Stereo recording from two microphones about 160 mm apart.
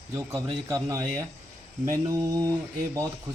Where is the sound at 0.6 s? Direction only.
20° right (ahead or behind).